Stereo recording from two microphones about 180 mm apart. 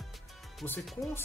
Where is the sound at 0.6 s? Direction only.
10° left (ahead or behind).